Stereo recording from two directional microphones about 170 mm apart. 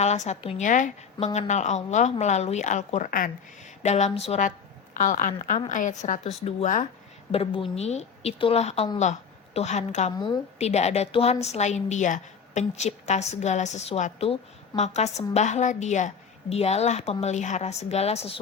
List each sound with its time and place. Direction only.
0.0 s a woman's voice: 40° left (ahead or behind)
3.8 s a woman's voice: 40° left (ahead or behind)
7.3 s a woman's voice: 35° left (ahead or behind)
10.2 s a woman's voice: 25° left (ahead or behind)
10.6 s a woman's voice: 40° left (ahead or behind)